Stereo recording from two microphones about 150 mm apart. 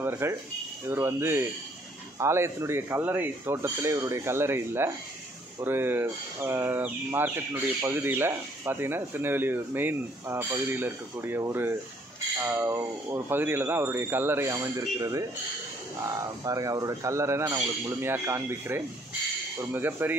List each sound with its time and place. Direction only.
0.0 s speech: 15° right (ahead or behind)